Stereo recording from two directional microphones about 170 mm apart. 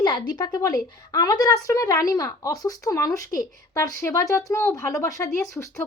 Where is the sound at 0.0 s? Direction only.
25° left (ahead or behind).